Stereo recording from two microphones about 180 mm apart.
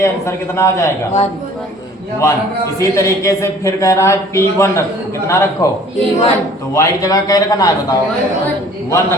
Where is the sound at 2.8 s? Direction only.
15° left (ahead or behind).